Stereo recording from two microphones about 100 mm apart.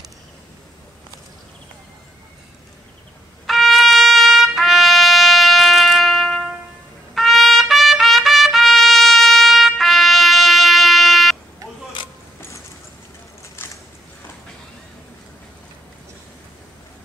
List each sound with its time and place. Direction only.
3.4 s trumpet: centre (ahead or behind)
12.4 s music: 30° left (ahead or behind)